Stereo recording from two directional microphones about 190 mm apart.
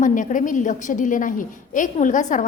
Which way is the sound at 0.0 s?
45° left (ahead or behind).